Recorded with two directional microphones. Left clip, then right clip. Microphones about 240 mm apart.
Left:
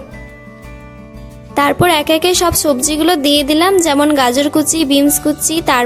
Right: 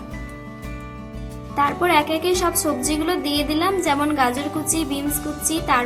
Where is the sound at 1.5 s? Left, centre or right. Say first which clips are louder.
Left 6 dB; left.